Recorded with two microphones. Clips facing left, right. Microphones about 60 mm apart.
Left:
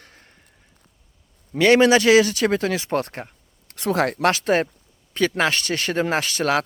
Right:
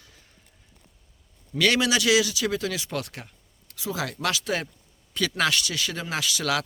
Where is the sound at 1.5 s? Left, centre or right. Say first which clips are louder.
Left 8 dB; left.